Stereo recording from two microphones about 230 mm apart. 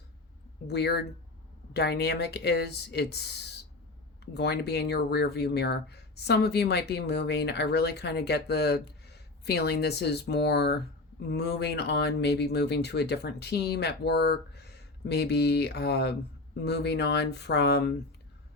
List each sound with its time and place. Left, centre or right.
0.7 s speech: left